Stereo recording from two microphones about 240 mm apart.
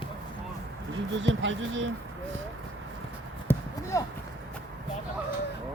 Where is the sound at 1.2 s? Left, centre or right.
Right.